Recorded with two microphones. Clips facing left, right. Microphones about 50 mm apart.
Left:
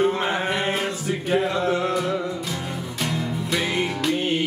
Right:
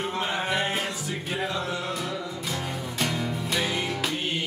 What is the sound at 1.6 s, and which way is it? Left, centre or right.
Music, left.